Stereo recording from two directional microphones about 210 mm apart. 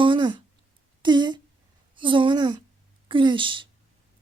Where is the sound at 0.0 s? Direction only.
20° right (ahead or behind).